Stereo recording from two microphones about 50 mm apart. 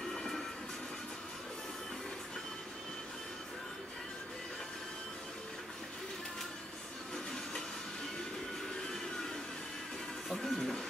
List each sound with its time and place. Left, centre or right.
0.1 s train: centre
10.3 s music: centre